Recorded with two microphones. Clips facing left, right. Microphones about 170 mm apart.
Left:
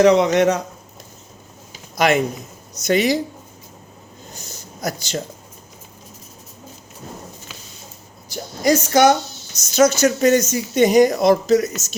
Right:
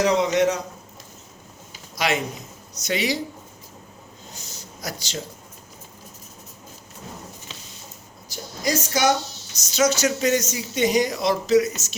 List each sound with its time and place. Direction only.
0.0 s a woman's voice: 65° left (ahead or behind)
2.0 s speech: 50° left (ahead or behind)
4.4 s a sound: 50° left (ahead or behind)
8.3 s a woman's voice: 60° left (ahead or behind)